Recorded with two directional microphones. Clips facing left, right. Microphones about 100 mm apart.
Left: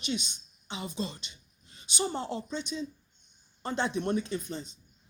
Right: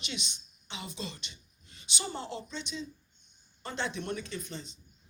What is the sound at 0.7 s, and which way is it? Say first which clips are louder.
Speech: left 5 dB; 40° left (ahead or behind).